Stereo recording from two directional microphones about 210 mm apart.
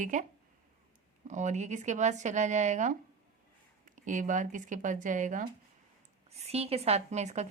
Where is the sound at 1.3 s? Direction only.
35° right (ahead or behind).